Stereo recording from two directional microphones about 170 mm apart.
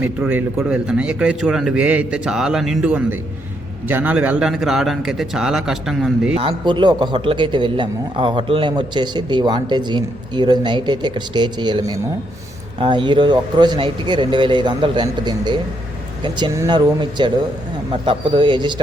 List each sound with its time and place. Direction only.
0.0 s a man's voice: 10° right (ahead or behind)
6.3 s a man's voice: 30° right (ahead or behind)